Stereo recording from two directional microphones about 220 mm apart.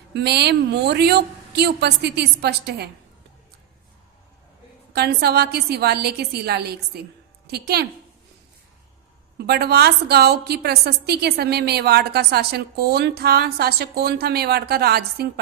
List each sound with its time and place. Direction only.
0.1 s a woman's voice: 50° right (ahead or behind)
4.9 s a woman's voice: 45° right (ahead or behind)
9.4 s a woman's voice: 45° right (ahead or behind)